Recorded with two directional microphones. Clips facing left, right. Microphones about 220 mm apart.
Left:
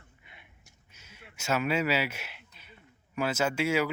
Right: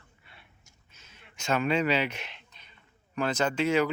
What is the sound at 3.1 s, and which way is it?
Speech, 5° left (ahead or behind).